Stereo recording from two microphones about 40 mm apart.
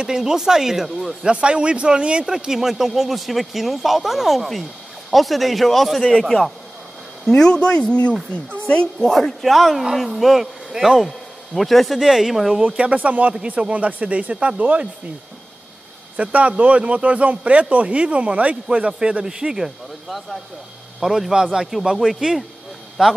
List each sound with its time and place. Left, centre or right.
0.0 s speech: centre
1.2 s speech: right
2.2 s speech: centre
7.2 s speech: centre
9.0 s speech: centre
11.1 s speech: centre
12.0 s speech: centre
12.7 s speech: right
16.2 s speech: right
18.7 s speech: right